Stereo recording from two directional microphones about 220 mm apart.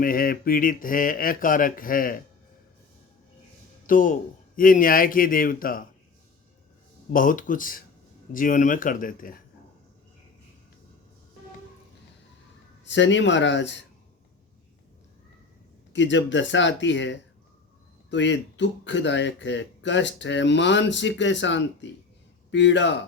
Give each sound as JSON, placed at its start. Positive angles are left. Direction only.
{"t": 0.0, "sound": "speech", "side_deg": 40}
{"t": 3.8, "sound": "speech", "side_deg": 35}
{"t": 7.1, "sound": "speech", "side_deg": 35}
{"t": 12.8, "sound": "speech", "side_deg": 55}
{"t": 15.9, "sound": "speech", "side_deg": 55}